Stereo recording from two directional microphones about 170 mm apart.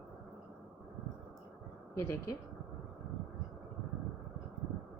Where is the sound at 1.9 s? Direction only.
15° left (ahead or behind).